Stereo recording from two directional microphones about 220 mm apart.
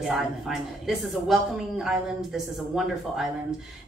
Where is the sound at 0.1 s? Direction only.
Centre (ahead or behind).